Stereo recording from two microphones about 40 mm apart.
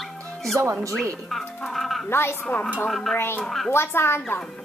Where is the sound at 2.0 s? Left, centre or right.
Left.